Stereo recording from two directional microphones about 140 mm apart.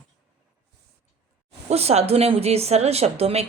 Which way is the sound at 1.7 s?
50° right (ahead or behind).